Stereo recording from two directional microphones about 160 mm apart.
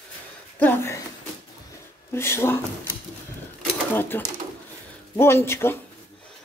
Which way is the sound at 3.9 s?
15° left (ahead or behind).